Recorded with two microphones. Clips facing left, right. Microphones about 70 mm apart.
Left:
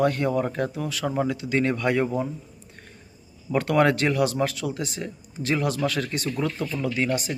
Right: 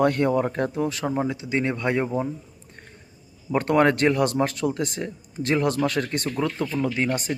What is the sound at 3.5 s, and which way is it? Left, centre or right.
A man's voice, right.